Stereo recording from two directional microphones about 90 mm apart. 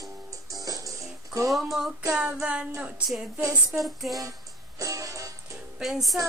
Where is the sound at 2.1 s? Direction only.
10° right (ahead or behind).